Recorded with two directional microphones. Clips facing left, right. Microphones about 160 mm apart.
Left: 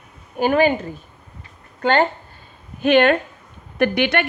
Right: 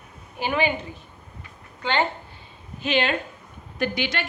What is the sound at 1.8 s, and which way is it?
A woman's voice, 45° left (ahead or behind).